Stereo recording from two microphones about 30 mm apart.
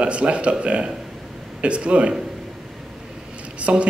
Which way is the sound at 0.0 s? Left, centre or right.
Right.